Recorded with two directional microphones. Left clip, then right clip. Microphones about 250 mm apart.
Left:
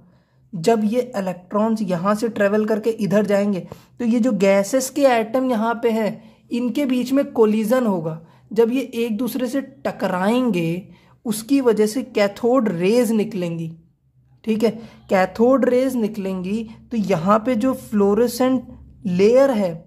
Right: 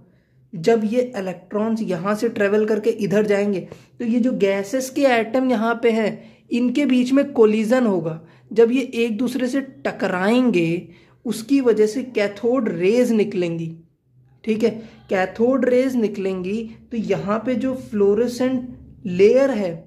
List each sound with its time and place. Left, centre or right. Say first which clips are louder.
0.6 s speech: right 1 dB; left